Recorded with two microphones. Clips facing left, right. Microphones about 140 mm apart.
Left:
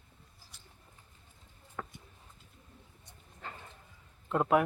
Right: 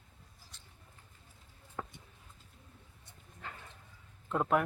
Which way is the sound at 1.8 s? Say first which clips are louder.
Even; 20° right (ahead or behind).